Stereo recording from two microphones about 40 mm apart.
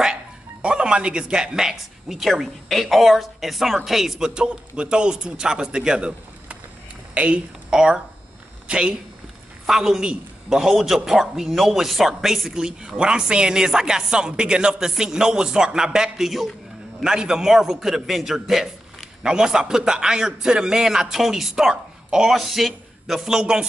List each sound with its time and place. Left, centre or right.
0.0 s speech: right; by 4.3 s centre
4.3 s a man's voice: right
7.7 s a man's voice: centre
9.7 s a man's voice: centre
12.5 s a man's voice: centre
16.3 s speech: centre
17.0 s a man's voice: centre